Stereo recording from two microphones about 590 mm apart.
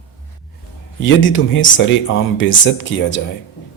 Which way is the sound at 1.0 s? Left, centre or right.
Centre.